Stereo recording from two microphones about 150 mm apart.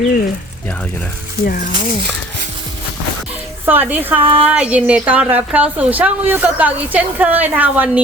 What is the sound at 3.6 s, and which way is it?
Speech, 10° right (ahead or behind).